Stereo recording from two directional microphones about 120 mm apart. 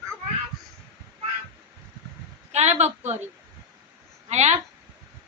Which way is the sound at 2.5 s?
65° right (ahead or behind).